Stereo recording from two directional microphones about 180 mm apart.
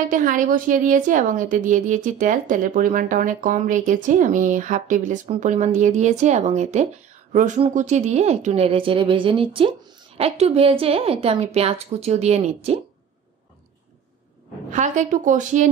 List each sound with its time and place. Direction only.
0.1 s a woman's voice: 50° right (ahead or behind)
14.7 s a woman's voice: 40° right (ahead or behind)